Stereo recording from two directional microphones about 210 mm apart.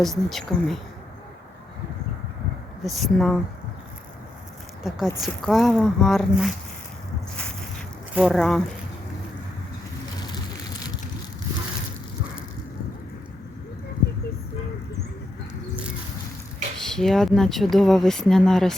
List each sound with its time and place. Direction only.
0.0 s speech: centre (ahead or behind)
2.8 s speech: centre (ahead or behind)
4.8 s speech: centre (ahead or behind)
8.1 s speech: centre (ahead or behind)
10.2 s vehicle: 20° left (ahead or behind)
16.7 s speech: centre (ahead or behind)